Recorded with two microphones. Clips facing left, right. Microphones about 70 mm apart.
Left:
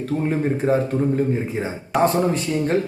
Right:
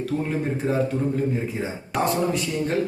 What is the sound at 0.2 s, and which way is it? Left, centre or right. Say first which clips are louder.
Speech: left 4 dB; left.